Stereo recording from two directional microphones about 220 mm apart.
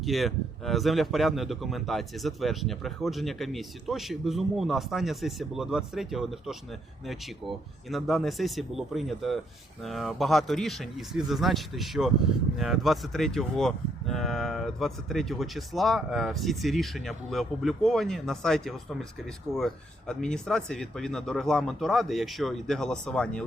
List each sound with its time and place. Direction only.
0.0 s speech: centre (ahead or behind)